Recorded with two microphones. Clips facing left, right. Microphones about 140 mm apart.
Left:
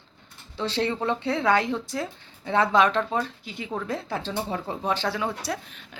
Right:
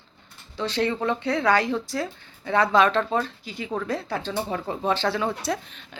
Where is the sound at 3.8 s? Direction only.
25° left (ahead or behind).